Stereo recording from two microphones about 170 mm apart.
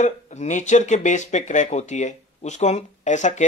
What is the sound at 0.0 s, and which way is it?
Speech, 45° left (ahead or behind).